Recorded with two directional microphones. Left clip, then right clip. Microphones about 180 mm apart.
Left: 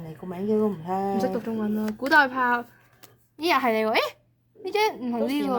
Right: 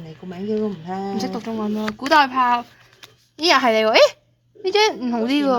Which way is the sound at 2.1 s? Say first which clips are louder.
Right 5 dB; 55° right (ahead or behind).